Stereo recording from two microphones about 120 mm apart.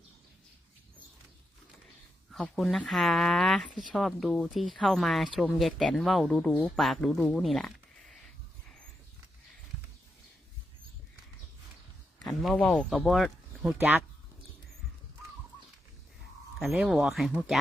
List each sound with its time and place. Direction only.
2.3 s speech: centre (ahead or behind)
12.4 s speech: 5° left (ahead or behind)
13.7 s speech: 15° right (ahead or behind)
16.6 s speech: centre (ahead or behind)